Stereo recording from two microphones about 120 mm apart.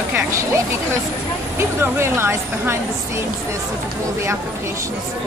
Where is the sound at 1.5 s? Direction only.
20° right (ahead or behind).